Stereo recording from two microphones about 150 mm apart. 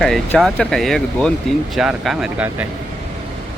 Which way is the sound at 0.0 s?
5° left (ahead or behind).